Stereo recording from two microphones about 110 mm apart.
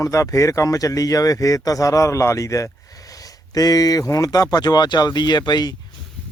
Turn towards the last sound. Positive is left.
turn(degrees=40)  # may be behind; listen again after turning